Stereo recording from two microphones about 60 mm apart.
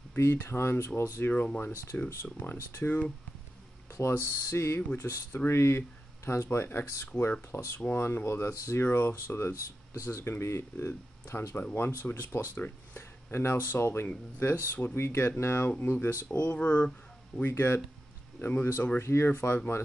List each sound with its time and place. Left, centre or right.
0.2 s speech: left
1.3 s speech: left
4.1 s speech: left
16.5 s speech: left
17.4 s speech: left